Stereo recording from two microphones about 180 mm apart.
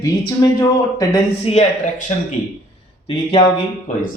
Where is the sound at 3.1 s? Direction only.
25° left (ahead or behind).